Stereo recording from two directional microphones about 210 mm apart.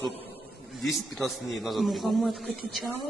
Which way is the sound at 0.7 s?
Centre (ahead or behind).